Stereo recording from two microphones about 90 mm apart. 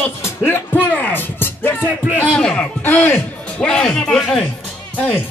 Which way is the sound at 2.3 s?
10° left (ahead or behind).